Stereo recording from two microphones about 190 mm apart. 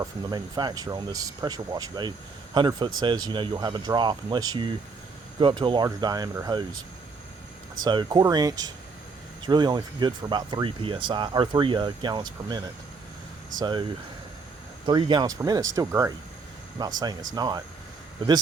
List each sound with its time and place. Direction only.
0.0 s speech: 20° right (ahead or behind)
7.8 s speech: 25° right (ahead or behind)
14.8 s speech: 25° right (ahead or behind)